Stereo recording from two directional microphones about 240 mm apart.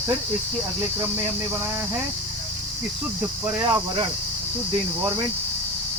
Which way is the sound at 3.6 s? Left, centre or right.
Centre.